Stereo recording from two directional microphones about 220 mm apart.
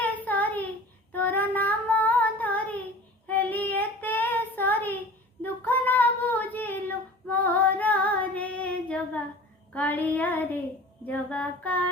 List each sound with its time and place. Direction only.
0.0 s child singing: 5° left (ahead or behind)